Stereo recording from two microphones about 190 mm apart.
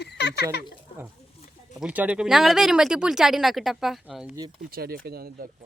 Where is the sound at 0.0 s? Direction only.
60° left (ahead or behind).